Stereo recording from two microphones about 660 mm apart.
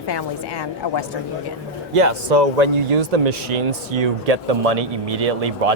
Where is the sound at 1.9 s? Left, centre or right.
Right.